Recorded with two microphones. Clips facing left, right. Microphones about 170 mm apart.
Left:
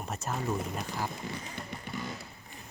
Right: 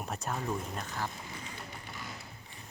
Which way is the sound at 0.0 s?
Centre (ahead or behind).